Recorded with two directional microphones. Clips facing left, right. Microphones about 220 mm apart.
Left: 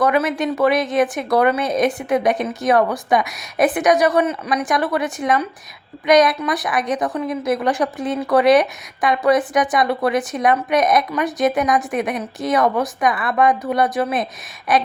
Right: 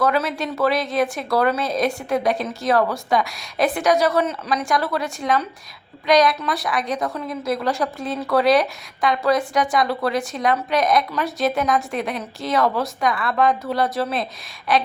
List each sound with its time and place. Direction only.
0.0 s a woman's voice: 20° left (ahead or behind)